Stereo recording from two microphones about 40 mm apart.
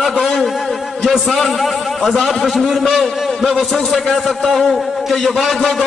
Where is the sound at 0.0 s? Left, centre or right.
Centre.